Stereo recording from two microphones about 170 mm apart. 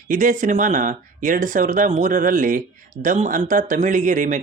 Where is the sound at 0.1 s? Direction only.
50° right (ahead or behind).